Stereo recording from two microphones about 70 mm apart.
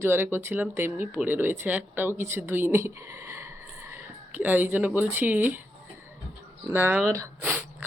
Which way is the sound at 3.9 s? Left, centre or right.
Right.